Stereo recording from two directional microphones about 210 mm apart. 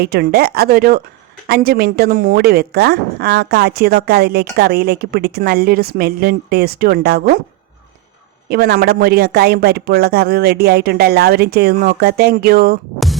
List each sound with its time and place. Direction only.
0.0 s a woman's voice: 45° right (ahead or behind)
8.4 s a woman's voice: 45° right (ahead or behind)